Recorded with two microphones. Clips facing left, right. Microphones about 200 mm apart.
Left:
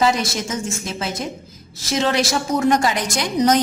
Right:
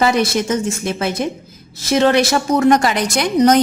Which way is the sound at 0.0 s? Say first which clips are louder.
Right 4 dB; 60° right (ahead or behind).